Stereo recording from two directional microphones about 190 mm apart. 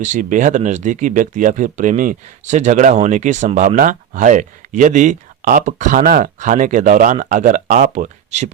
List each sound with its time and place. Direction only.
0.0 s speech: 40° right (ahead or behind)